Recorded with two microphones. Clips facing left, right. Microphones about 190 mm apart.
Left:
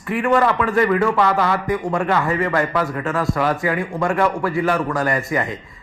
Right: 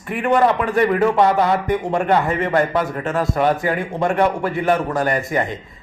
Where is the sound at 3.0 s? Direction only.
25° right (ahead or behind).